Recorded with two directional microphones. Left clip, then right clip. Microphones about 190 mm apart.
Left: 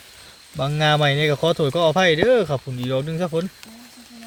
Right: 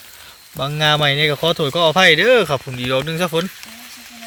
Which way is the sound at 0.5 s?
5° left (ahead or behind).